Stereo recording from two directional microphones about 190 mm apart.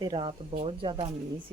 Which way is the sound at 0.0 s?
25° right (ahead or behind).